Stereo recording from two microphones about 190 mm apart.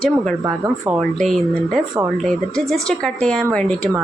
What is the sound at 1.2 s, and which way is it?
A woman's voice, centre (ahead or behind).